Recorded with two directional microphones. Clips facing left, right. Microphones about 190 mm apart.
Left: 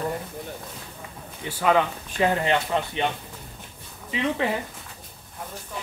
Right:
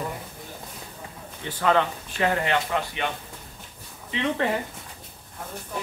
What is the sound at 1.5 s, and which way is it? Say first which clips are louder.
Speech: left 1 dB; 10° left (ahead or behind).